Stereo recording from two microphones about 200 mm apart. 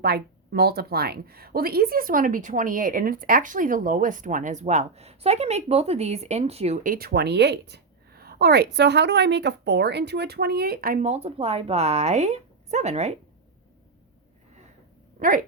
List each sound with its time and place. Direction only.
0.0 s speech: 50° right (ahead or behind); by 6.9 s 30° right (ahead or behind)
6.9 s a woman's voice: 50° right (ahead or behind); by 13.1 s 35° right (ahead or behind)